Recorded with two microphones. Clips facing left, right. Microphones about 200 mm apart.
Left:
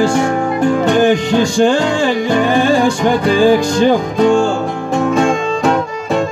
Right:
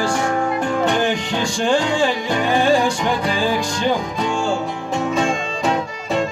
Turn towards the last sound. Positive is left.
turn(degrees=50)  # may be behind; listen again after turning